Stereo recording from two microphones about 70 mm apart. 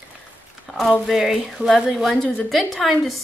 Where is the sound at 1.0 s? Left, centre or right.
Centre.